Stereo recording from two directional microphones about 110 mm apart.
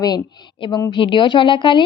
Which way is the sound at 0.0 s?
40° left (ahead or behind).